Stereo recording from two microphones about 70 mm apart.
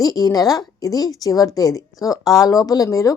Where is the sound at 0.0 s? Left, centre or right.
Left.